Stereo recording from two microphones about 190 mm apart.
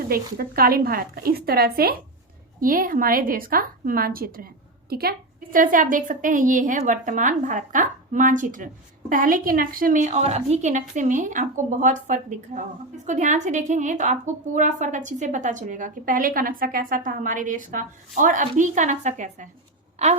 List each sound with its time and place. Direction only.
0.3 s a woman's voice: 50° right (ahead or behind)